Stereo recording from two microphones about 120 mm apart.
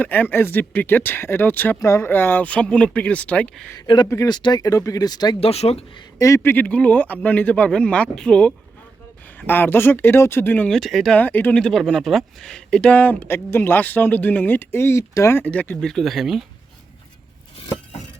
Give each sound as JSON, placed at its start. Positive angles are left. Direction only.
{"t": 0.0, "sound": "speech", "side_deg": 15}
{"t": 3.8, "sound": "speech", "side_deg": 40}
{"t": 4.1, "sound": "speech", "side_deg": 25}
{"t": 4.4, "sound": "speech", "side_deg": 35}
{"t": 5.4, "sound": "speech", "side_deg": 60}
{"t": 6.1, "sound": "speech", "side_deg": 25}
{"t": 9.5, "sound": "speech", "side_deg": 20}
{"t": 10.7, "sound": "speech", "side_deg": 0}
{"t": 11.2, "sound": "speech", "side_deg": 15}
{"t": 11.5, "sound": "speech", "side_deg": 5}
{"t": 15.9, "sound": "speech", "side_deg": 0}